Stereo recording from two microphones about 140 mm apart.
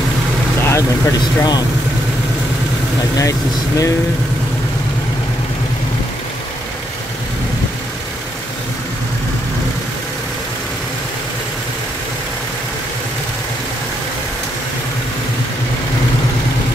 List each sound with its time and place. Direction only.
0.7 s speech: 20° left (ahead or behind)
3.2 s speech: 25° left (ahead or behind)